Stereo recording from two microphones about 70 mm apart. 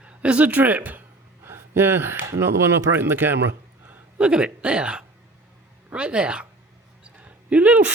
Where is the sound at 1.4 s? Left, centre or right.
Right.